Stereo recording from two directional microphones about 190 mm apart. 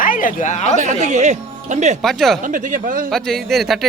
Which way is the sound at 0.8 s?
40° right (ahead or behind).